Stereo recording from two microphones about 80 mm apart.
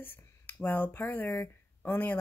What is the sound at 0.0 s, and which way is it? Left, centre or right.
Speech, left.